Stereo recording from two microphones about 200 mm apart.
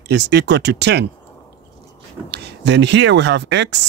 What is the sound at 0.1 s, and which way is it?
Speech, 60° right (ahead or behind).